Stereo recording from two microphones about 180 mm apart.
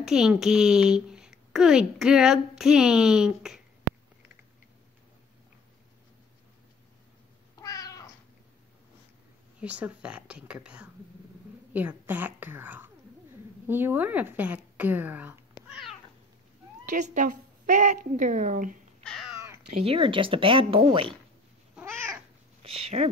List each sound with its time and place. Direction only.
0.0 s a child's voice: 5° right (ahead or behind)
7.6 s cat: 20° left (ahead or behind)
9.6 s a woman's voice: 10° right (ahead or behind)
15.7 s cat: centre (ahead or behind)
16.8 s a woman's voice: 45° right (ahead or behind)
19.0 s cat: centre (ahead or behind)
19.8 s speech: 30° right (ahead or behind)
21.7 s cat: 15° right (ahead or behind)
22.6 s speech: 30° right (ahead or behind)